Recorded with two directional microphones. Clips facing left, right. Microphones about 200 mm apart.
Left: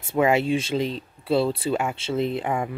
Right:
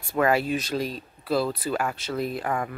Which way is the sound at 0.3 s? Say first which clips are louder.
Left 3 dB; 25° left (ahead or behind).